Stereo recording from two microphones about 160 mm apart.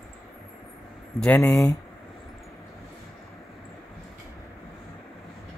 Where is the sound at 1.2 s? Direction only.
15° left (ahead or behind).